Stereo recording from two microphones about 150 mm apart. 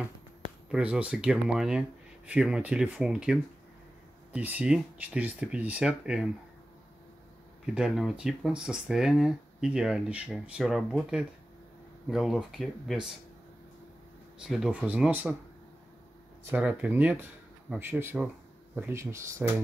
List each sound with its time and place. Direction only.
0.7 s speech: 5° right (ahead or behind)
7.7 s speech: 5° right (ahead or behind)
14.4 s speech: 5° right (ahead or behind)
16.4 s speech: 10° right (ahead or behind)